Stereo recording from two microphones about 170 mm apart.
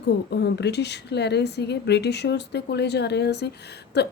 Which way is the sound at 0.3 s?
80° left.